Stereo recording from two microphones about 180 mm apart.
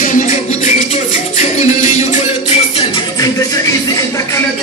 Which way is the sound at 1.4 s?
40° left (ahead or behind).